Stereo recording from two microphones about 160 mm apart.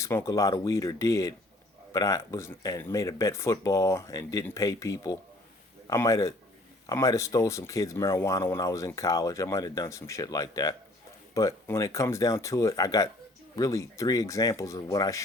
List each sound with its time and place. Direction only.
0.0 s speech: 15° left (ahead or behind)